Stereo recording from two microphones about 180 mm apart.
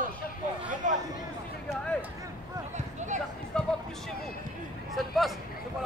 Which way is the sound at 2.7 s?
40° right (ahead or behind).